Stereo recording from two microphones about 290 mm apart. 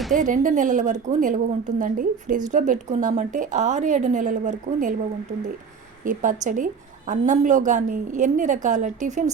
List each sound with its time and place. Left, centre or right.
0.1 s a woman's voice: right
6.1 s a woman's voice: right